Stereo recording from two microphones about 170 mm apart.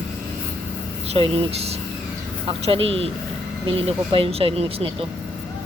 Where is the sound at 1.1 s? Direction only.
35° right (ahead or behind).